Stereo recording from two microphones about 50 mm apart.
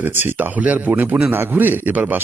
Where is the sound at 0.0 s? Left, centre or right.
Right.